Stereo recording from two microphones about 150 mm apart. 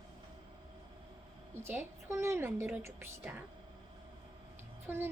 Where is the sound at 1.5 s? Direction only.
15° right (ahead or behind).